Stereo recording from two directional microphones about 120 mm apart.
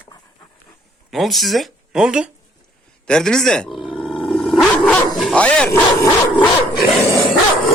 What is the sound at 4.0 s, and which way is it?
Roar, 50° left (ahead or behind).